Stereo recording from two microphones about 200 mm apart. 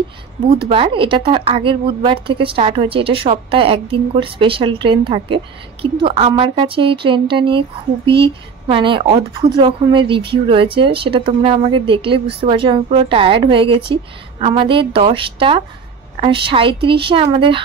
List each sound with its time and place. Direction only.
0.7 s speech: 30° right (ahead or behind)